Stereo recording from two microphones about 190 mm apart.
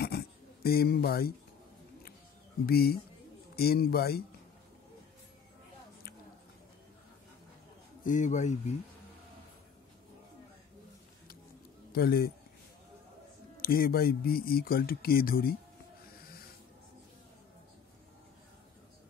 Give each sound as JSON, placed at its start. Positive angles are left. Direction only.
{"t": 0.1, "sound": "a sound", "side_deg": 55}
{"t": 0.7, "sound": "speech", "side_deg": 55}
{"t": 2.6, "sound": "speech", "side_deg": 55}
{"t": 8.0, "sound": "speech", "side_deg": 40}
{"t": 11.9, "sound": "a man's voice", "side_deg": 55}
{"t": 13.6, "sound": "speech", "side_deg": 50}